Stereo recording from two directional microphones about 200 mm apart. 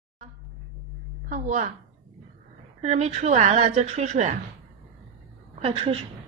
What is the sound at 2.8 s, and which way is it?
A woman's voice, 35° right (ahead or behind).